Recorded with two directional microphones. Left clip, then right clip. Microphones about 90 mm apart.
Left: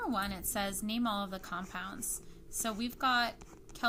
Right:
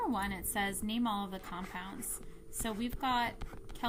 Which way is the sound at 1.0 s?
15° left (ahead or behind).